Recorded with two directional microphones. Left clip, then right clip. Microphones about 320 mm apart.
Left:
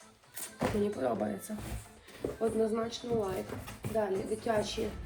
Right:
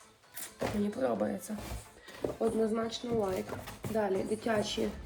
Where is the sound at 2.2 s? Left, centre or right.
Right.